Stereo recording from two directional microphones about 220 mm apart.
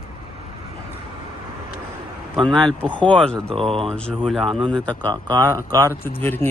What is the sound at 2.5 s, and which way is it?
Speech, 5° left (ahead or behind).